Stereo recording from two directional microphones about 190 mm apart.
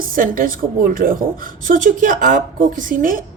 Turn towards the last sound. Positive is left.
turn(degrees=-45)  # may be behind; listen again after turning